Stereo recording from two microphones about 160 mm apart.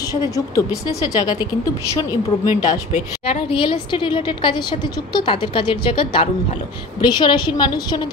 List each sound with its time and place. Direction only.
0.1 s a woman's voice: 25° left (ahead or behind)